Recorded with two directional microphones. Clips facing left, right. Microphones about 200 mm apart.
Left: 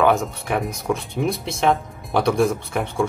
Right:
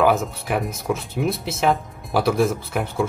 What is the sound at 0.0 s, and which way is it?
Speech, 5° right (ahead or behind).